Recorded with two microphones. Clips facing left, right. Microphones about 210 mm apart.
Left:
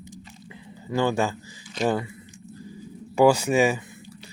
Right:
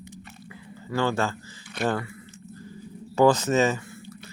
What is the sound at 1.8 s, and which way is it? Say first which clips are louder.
Speech: left 2 dB; 60° right (ahead or behind).